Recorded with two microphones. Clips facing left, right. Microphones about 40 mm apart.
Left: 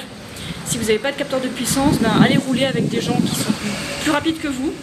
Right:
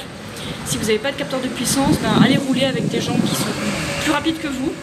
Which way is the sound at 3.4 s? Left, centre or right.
Right.